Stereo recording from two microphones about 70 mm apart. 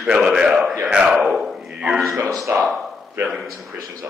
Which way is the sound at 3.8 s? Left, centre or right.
Right.